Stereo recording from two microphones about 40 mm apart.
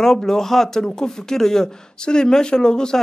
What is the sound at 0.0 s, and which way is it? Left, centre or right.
Speech, centre.